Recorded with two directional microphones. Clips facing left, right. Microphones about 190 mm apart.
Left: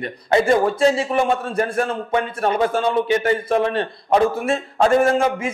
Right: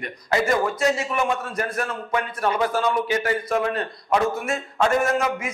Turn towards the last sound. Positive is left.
turn(degrees=30)  # may be behind; listen again after turning